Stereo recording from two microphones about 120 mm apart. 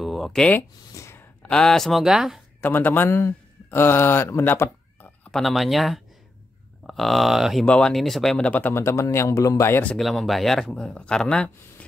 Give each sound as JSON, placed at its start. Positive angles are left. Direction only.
{"t": 0.0, "sound": "a sound", "side_deg": 0}
{"t": 0.6, "sound": "a sound", "side_deg": 20}
{"t": 1.5, "sound": "speech", "side_deg": 5}
{"t": 2.6, "sound": "a man's voice", "side_deg": 15}
{"t": 5.3, "sound": "speech", "side_deg": 0}
{"t": 9.9, "sound": "speech", "side_deg": 0}